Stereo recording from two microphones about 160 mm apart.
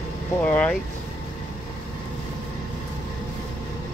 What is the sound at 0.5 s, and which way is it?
Vehicle, 5° left (ahead or behind).